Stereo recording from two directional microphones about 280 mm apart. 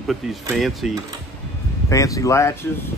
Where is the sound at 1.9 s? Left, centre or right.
Centre.